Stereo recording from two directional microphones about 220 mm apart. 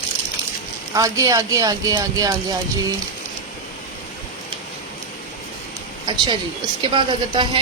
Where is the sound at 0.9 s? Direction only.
15° right (ahead or behind).